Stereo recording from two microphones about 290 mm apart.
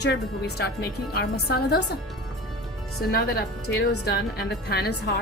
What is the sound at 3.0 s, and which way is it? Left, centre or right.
Speech, left.